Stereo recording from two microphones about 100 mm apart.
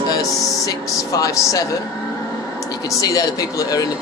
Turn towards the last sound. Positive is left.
turn(degrees=40)  # may be behind; listen again after turning